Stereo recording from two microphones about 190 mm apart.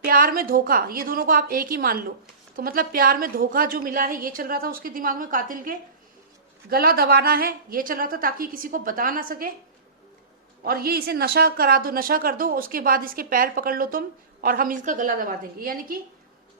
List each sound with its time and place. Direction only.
0.0 s speech: 50° right (ahead or behind)
10.6 s speech: 50° right (ahead or behind)